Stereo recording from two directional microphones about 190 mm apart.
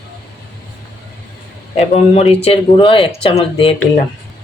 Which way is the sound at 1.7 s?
35° left (ahead or behind).